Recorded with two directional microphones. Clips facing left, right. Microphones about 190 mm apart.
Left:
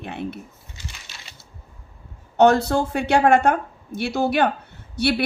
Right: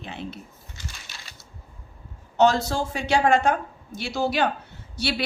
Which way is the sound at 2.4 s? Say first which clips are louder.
Left 4 dB; 60° left (ahead or behind).